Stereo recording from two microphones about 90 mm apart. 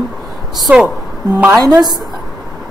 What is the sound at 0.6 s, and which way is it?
Speech, 5° right (ahead or behind).